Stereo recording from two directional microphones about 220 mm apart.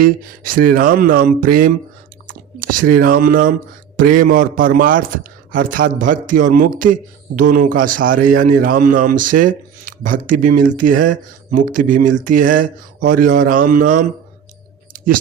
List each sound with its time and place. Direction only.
0.0 s a man's voice: 40° right (ahead or behind)
2.2 s chewing: 40° right (ahead or behind)
2.9 s a man's voice: 40° right (ahead or behind)
14.9 s a sound: 40° right (ahead or behind)